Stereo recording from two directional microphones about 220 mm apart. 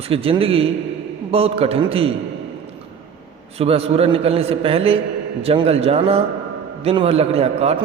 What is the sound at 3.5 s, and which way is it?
A man's voice, 25° right (ahead or behind).